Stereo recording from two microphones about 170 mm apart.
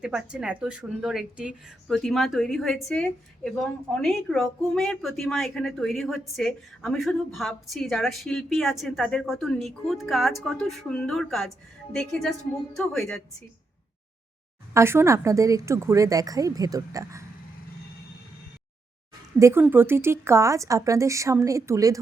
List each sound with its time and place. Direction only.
0.0 s speech: 5° right (ahead or behind)
14.7 s speech: 15° right (ahead or behind)
19.4 s speech: 15° right (ahead or behind)